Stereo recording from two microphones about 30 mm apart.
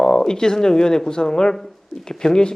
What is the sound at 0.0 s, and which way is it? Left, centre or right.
Speech, left.